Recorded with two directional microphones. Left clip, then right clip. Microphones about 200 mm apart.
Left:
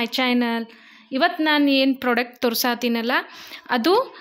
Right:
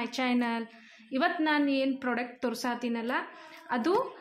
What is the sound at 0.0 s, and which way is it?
A woman's voice, 45° left (ahead or behind).